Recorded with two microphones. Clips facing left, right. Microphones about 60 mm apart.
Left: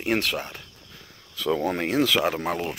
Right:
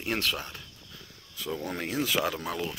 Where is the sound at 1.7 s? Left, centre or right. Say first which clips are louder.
Left 4 dB; left.